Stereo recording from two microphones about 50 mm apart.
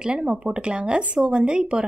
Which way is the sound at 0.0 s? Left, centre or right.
Centre.